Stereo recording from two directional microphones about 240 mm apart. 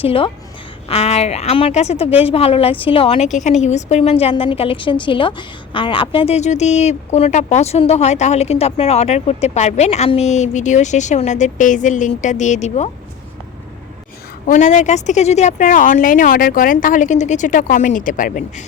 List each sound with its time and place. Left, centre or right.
0.0 s a woman's voice: left
14.4 s a woman's voice: left